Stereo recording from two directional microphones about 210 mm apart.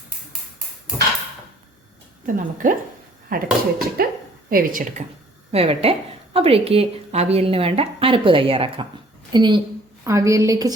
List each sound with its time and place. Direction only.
2.2 s speech: 40° right (ahead or behind)
5.5 s a woman's voice: 30° right (ahead or behind)